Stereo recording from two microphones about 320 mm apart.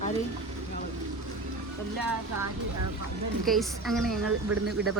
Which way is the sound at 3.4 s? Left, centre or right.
Centre.